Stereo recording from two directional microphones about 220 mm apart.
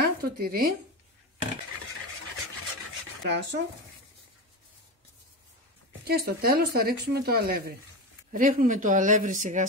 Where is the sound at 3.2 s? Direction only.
55° right (ahead or behind).